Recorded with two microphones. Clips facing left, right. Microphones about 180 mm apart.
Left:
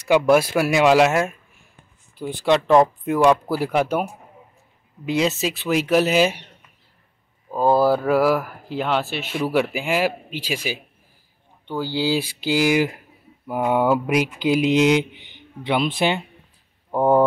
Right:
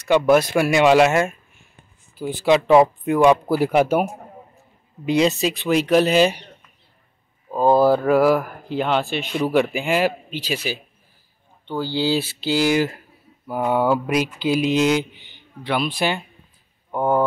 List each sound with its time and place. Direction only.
0.0 s speech: 5° left (ahead or behind)
7.5 s speech: 5° left (ahead or behind); by 16.2 s 20° left (ahead or behind)